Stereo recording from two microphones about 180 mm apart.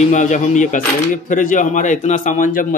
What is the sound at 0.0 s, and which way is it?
A man's voice, 40° left (ahead or behind).